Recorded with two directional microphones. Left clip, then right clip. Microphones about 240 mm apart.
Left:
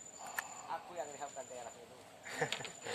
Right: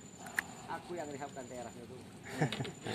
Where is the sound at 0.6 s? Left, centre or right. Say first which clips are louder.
Right 1 dB; centre.